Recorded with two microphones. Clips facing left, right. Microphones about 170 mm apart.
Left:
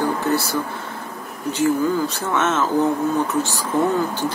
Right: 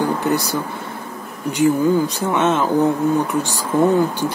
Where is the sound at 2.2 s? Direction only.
15° right (ahead or behind).